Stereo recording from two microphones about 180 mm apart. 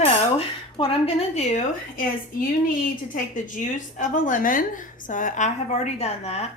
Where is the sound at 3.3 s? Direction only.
45° left (ahead or behind).